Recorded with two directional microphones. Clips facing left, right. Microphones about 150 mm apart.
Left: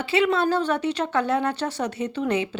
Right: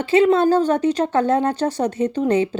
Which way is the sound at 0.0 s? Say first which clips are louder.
Right 7 dB; 45° right (ahead or behind).